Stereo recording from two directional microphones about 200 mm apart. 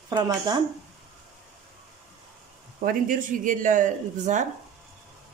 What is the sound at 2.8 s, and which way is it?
Speech, 40° right (ahead or behind).